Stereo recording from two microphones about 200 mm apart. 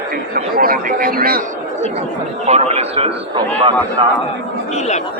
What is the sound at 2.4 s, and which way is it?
A man's voice, 30° right (ahead or behind).